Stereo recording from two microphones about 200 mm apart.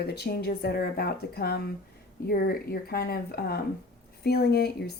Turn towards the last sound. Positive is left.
turn(degrees=55)  # may be behind; listen again after turning